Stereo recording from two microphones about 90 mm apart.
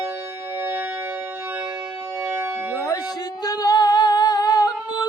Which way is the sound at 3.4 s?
45° left (ahead or behind).